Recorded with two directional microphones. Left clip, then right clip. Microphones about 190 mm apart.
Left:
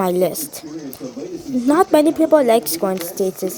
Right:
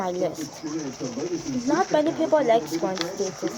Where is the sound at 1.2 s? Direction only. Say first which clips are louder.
Right 1 dB; 20° right (ahead or behind).